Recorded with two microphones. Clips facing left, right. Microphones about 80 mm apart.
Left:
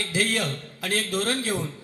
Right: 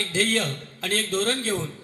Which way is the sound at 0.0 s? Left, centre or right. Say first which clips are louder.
Right 1 dB; centre.